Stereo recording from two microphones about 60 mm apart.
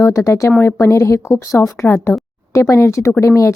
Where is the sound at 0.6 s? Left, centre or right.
Left.